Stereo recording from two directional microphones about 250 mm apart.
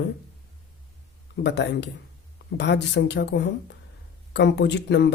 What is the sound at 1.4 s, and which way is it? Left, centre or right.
A woman's voice, left.